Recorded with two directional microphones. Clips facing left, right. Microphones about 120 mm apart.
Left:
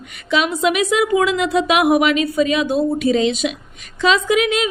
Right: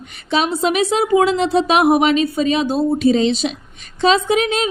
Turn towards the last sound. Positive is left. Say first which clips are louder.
# even
turn(degrees=-35)  # may be behind; listen again after turning